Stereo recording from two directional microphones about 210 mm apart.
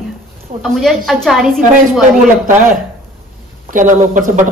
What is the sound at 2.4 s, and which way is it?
A man's voice, 35° right (ahead or behind).